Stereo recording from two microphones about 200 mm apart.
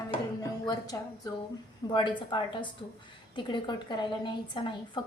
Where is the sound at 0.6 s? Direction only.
20° left (ahead or behind).